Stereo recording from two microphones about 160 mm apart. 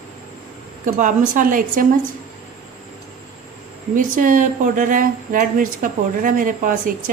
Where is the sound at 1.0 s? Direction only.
55° right (ahead or behind).